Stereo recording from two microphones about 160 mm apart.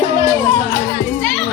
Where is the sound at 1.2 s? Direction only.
5° left (ahead or behind).